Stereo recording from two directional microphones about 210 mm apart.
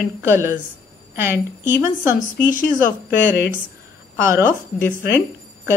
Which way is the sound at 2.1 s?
40° left (ahead or behind).